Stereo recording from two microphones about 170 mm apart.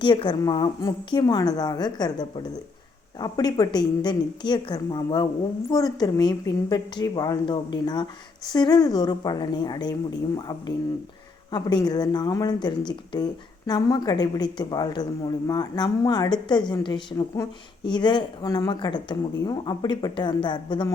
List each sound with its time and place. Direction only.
0.0 s a woman's voice: 30° left (ahead or behind)
11.5 s a woman's voice: 25° left (ahead or behind)